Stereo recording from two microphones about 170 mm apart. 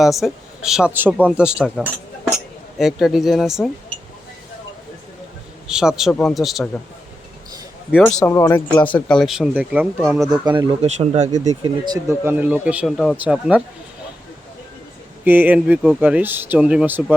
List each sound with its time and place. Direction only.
0.0 s speech: centre (ahead or behind)
5.6 s speech: 5° right (ahead or behind)
8.0 s speech: 10° left (ahead or behind)
10.4 s speech: 25° right (ahead or behind)
10.8 s speech: 40° right (ahead or behind)
11.3 s speech: 20° right (ahead or behind)
15.2 s speech: 10° right (ahead or behind)